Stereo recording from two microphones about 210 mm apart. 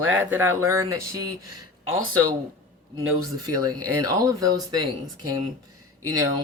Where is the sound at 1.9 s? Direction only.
80° right.